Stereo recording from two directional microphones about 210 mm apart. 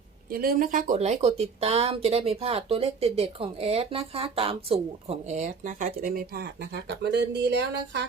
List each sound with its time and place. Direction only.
0.3 s speech: 45° right (ahead or behind)